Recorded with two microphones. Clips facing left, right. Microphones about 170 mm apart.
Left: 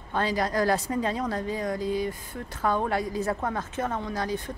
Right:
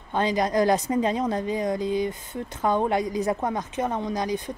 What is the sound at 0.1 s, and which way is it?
A woman's voice, 20° right (ahead or behind).